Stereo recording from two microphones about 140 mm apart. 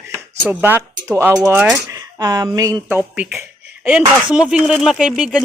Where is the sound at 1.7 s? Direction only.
25° right (ahead or behind).